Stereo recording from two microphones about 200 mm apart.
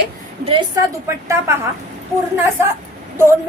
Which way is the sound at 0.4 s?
25° right (ahead or behind).